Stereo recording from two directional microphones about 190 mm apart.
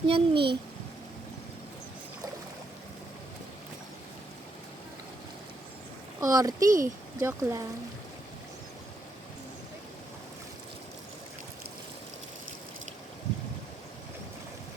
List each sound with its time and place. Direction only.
0.1 s a child's voice: 25° right (ahead or behind)
6.1 s speech: 20° right (ahead or behind)
6.7 s speech: 45° right (ahead or behind)
7.2 s speech: 15° right (ahead or behind)